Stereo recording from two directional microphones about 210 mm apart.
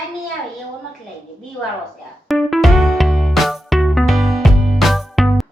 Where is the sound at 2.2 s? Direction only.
Centre (ahead or behind).